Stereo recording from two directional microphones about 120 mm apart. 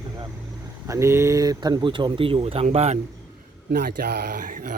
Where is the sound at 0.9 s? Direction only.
25° right (ahead or behind); by 2.6 s 55° right (ahead or behind).